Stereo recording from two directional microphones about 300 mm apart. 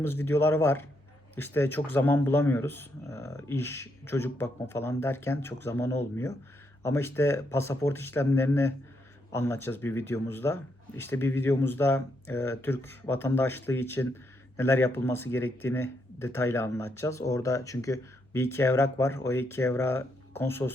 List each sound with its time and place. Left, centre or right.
0.0 s speech: centre